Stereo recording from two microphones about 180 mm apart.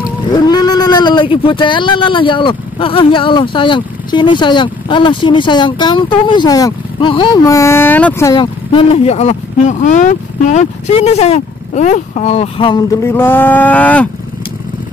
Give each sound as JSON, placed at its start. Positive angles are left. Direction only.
{"t": 0.3, "sound": "speech", "side_deg": 25}
{"t": 7.4, "sound": "speech", "side_deg": 15}
{"t": 8.4, "sound": "speech", "side_deg": 30}
{"t": 13.0, "sound": "speech", "side_deg": 10}